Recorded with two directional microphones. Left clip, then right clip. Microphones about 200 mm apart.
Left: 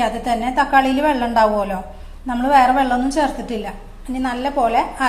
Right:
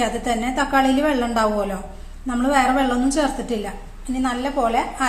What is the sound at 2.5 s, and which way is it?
A woman's voice, 20° left (ahead or behind).